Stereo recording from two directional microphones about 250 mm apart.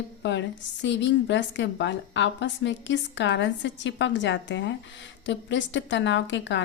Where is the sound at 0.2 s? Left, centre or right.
Left.